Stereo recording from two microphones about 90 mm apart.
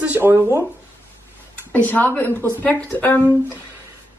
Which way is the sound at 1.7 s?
20° left (ahead or behind).